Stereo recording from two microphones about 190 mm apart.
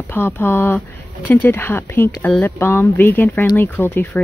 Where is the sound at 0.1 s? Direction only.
10° left (ahead or behind).